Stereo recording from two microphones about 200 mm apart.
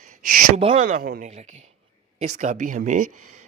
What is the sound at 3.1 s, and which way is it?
Speech, 90° right.